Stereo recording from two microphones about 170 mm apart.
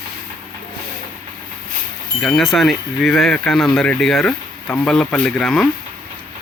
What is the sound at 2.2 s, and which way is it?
Speech, centre (ahead or behind).